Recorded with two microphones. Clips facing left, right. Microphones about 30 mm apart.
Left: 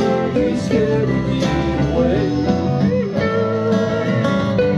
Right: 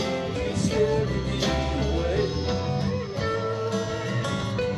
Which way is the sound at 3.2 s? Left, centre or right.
Left.